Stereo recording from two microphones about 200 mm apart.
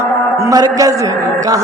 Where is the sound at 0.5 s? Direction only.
20° right (ahead or behind).